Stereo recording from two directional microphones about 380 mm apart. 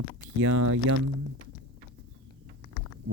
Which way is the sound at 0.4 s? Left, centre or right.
Right.